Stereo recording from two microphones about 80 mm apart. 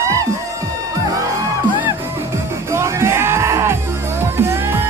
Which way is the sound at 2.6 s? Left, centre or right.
Right.